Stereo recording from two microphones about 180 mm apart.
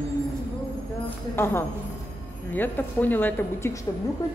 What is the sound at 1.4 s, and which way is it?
Speech, 15° left (ahead or behind).